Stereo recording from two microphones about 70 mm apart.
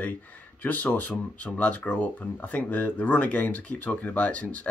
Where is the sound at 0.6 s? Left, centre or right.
Left.